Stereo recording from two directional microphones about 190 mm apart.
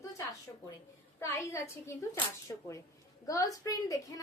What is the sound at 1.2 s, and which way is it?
Speech, 15° left (ahead or behind).